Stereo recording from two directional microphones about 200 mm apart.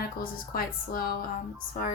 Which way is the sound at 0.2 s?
45° left (ahead or behind).